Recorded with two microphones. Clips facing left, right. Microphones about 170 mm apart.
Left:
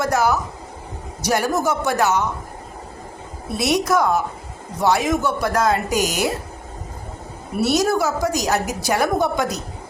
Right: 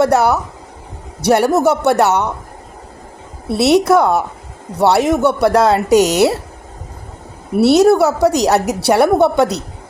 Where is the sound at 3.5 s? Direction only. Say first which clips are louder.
Right 8 dB; 70° right (ahead or behind).